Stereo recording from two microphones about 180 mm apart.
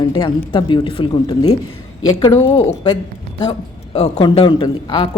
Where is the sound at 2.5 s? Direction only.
30° left (ahead or behind).